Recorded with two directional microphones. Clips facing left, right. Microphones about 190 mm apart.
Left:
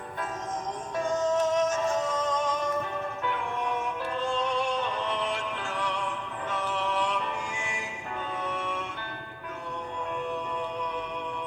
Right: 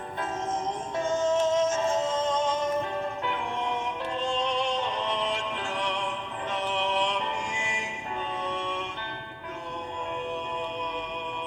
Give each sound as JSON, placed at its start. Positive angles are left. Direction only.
{"t": 0.9, "sound": "music", "side_deg": -25}